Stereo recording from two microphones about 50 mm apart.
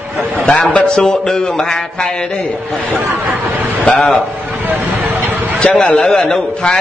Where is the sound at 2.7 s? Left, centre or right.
Centre.